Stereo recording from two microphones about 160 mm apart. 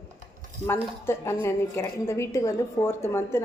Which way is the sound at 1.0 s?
15° left (ahead or behind).